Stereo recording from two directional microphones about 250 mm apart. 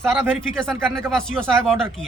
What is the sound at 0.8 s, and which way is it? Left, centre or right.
Speech, centre.